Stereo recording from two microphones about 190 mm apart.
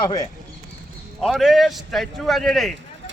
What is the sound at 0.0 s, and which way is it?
Speech, 20° left (ahead or behind).